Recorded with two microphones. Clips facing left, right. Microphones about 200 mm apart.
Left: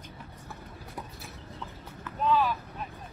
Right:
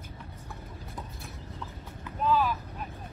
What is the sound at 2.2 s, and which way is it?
Vehicle, centre (ahead or behind).